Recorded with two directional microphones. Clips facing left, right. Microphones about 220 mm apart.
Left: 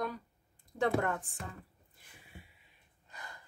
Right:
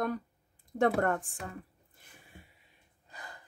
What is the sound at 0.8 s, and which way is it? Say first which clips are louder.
Speech: right 4 dB; 50° right (ahead or behind).